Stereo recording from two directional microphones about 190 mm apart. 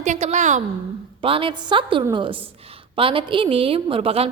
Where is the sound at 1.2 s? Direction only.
30° right (ahead or behind).